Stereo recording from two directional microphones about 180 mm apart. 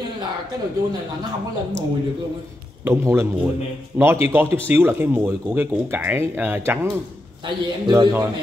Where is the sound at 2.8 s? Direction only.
15° right (ahead or behind).